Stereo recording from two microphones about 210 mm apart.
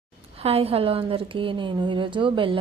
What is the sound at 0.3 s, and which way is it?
A woman's voice, 30° right (ahead or behind).